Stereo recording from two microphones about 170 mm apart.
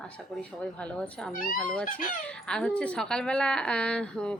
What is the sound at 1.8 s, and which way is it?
Speech, 55° left (ahead or behind).